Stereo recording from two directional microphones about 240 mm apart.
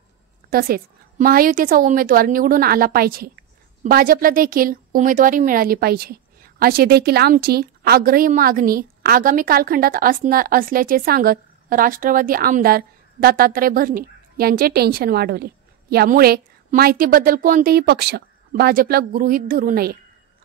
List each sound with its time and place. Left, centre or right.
0.5 s a woman's voice: right